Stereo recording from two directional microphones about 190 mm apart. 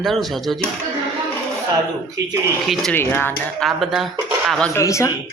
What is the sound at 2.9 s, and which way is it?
Speech, 10° left (ahead or behind).